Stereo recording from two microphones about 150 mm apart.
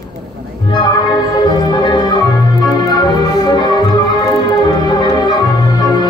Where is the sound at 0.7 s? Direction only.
30° left (ahead or behind).